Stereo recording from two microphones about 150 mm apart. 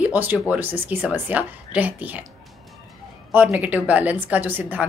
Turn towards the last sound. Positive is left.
turn(degrees=-10)  # may be behind; listen again after turning